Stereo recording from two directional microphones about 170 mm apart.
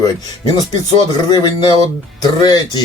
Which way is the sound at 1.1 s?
20° left (ahead or behind).